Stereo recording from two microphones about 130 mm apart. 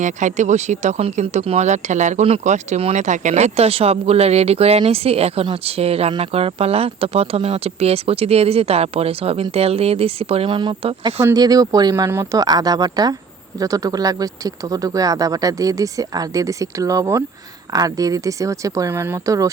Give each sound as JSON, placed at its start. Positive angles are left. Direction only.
{"t": 0.0, "sound": "speech", "side_deg": -70}